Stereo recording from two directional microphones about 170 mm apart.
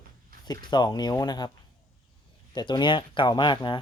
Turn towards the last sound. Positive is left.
turn(degrees=25)  # may be behind; listen again after turning